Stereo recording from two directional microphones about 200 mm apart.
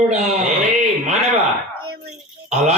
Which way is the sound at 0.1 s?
35° right (ahead or behind).